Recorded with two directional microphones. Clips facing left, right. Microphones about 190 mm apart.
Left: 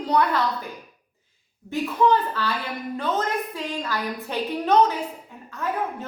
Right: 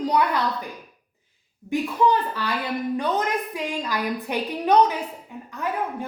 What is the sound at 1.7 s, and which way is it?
A woman's voice, 15° right (ahead or behind).